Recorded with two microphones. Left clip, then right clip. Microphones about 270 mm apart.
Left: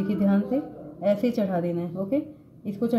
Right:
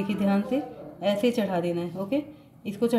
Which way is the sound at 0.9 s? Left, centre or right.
Centre.